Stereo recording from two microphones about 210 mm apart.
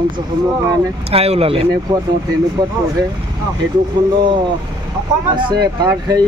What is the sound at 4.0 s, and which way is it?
Speech, 20° right (ahead or behind).